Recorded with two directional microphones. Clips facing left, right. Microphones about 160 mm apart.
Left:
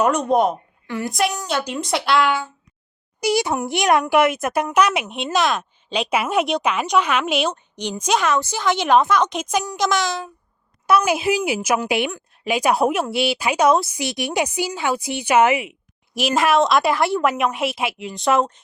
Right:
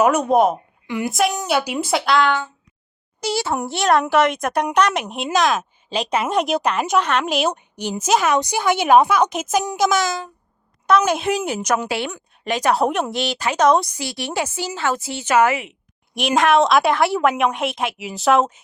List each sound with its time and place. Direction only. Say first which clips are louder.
0.0 s a woman's voice: right 2 dB; 5° right (ahead or behind)
0.9 s a woman's voice: right 2 dB; 15° right (ahead or behind); by 10.2 s centre (ahead or behind)
10.8 s speech: even; 10° left (ahead or behind)
12.1 s speech: left 1 dB; 5° left (ahead or behind)
14.0 s speech: left 2 dB; 15° left (ahead or behind)
16.1 s a woman's voice: right 1 dB; centre (ahead or behind)